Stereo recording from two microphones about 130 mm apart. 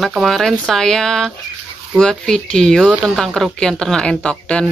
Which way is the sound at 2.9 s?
10° right (ahead or behind).